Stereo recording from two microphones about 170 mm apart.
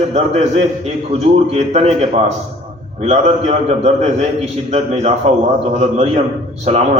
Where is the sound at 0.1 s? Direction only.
40° right (ahead or behind).